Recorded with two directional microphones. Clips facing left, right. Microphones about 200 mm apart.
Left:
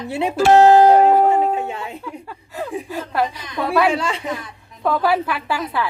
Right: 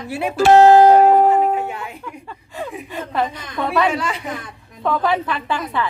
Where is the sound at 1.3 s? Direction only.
25° left (ahead or behind).